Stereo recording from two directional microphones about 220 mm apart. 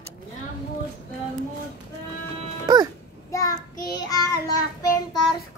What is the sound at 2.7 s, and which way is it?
Music, 15° right (ahead or behind).